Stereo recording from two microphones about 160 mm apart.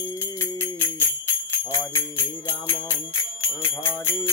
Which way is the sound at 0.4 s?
15° left (ahead or behind).